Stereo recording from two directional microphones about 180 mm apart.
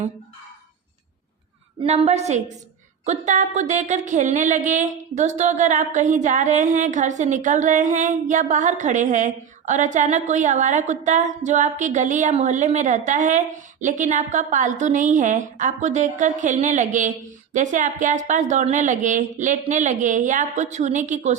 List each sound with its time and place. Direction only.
1.8 s a woman's voice: 35° right (ahead or behind)